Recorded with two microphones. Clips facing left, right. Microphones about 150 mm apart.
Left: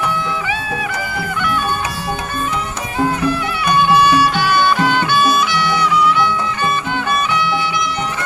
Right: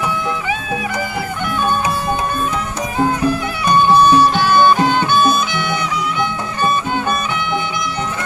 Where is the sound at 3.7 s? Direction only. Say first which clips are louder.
Right 2 dB; 40° right (ahead or behind).